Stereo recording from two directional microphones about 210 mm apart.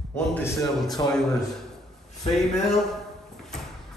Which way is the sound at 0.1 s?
10° left (ahead or behind).